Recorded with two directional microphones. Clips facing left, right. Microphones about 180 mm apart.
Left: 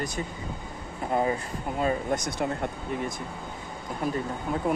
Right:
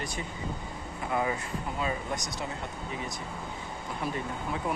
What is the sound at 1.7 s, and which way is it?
Speech, 50° left (ahead or behind).